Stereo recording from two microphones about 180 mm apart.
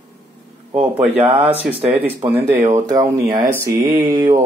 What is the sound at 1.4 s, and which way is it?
Speech, 10° right (ahead or behind).